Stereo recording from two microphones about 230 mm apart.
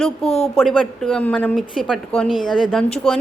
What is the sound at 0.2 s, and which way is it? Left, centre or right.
Speech, left.